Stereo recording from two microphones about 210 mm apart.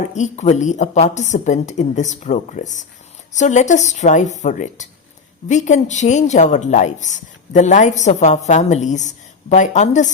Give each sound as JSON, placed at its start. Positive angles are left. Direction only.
{"t": 0.1, "sound": "a woman's voice", "side_deg": 35}